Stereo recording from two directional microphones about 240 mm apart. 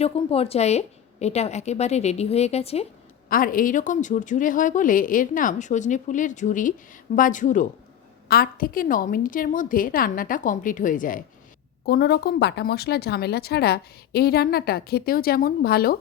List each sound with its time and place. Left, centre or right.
0.0 s a woman's voice: left
3.2 s speech: left